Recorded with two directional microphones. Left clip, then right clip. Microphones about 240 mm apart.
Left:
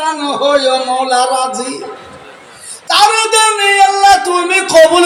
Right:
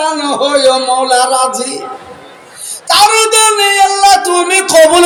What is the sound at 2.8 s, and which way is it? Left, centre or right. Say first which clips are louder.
Music: right 2 dB; right.